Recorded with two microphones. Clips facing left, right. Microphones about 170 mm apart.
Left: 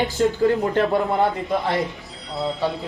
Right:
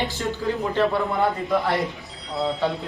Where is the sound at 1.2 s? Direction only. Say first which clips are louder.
Left 1 dB; 20° left (ahead or behind).